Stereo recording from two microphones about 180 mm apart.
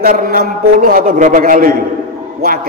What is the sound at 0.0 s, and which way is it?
A man's voice, 55° right (ahead or behind).